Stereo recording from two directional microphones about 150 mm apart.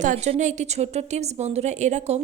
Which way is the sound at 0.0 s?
55° right (ahead or behind).